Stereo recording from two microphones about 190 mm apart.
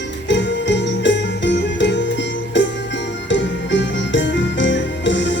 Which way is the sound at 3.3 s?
70° left (ahead or behind).